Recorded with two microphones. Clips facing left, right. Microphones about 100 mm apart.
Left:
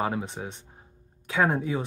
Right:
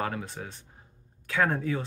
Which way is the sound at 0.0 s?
20° left (ahead or behind).